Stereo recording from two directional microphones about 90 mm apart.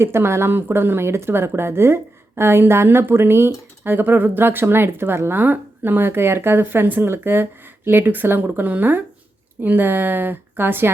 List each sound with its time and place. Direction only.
0.0 s speech: 25° right (ahead or behind)